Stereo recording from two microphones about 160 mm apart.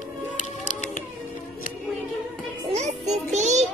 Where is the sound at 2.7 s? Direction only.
45° right (ahead or behind).